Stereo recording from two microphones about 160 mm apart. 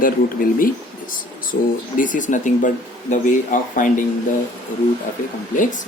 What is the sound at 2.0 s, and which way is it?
Speech, 55° left (ahead or behind).